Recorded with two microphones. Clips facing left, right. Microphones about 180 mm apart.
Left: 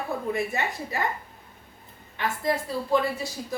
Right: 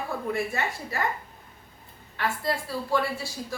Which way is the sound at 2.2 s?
20° left (ahead or behind).